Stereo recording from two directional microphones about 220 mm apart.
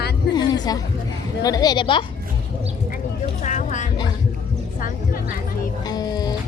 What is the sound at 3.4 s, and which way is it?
Speech, 35° left (ahead or behind).